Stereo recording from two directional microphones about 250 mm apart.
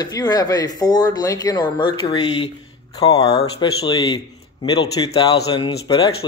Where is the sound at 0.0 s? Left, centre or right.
Centre.